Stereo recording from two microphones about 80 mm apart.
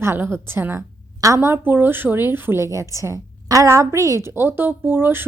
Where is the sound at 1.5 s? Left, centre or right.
Right.